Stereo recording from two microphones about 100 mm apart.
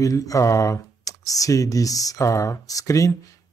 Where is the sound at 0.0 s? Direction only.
35° left (ahead or behind).